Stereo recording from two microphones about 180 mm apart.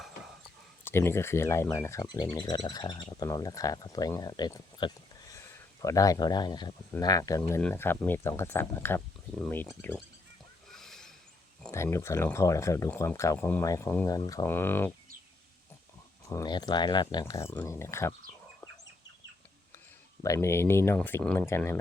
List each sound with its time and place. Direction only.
0.9 s speech: 15° left (ahead or behind)
10.7 s a sound: centre (ahead or behind)
11.7 s speech: 15° left (ahead or behind)
16.3 s speech: 20° left (ahead or behind)
20.2 s speech: 15° left (ahead or behind)